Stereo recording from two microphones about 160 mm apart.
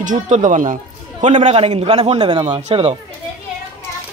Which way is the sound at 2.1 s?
30° right (ahead or behind).